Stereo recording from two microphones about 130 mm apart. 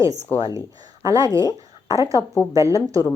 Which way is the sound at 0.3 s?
40° left (ahead or behind).